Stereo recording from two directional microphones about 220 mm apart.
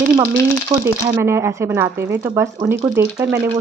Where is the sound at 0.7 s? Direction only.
30° right (ahead or behind).